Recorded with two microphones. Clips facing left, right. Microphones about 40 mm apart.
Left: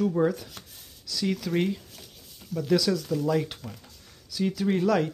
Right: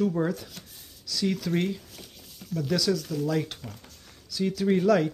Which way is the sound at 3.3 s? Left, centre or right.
Centre.